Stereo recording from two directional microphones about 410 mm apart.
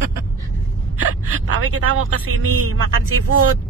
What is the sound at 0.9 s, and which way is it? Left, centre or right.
A woman's voice, right.